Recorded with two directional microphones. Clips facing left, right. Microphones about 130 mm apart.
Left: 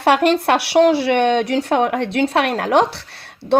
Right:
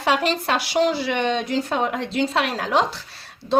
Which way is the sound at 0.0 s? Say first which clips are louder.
Left 7 dB; 60° left (ahead or behind).